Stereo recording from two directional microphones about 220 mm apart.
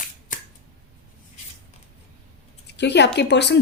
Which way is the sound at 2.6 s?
50° left (ahead or behind).